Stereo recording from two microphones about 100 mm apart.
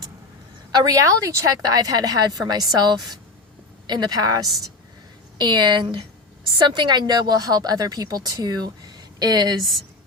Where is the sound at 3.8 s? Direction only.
45° right (ahead or behind).